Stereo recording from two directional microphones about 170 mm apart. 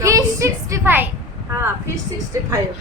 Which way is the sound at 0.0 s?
20° right (ahead or behind).